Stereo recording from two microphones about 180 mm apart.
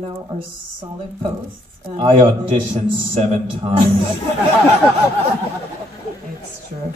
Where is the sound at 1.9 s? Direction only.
45° right (ahead or behind).